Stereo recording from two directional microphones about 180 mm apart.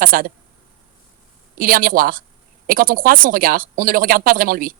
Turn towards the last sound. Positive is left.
turn(degrees=-50)  # may be behind; listen again after turning